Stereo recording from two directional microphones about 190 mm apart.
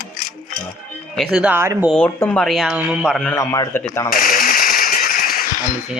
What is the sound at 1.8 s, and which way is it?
Speech, 5° left (ahead or behind).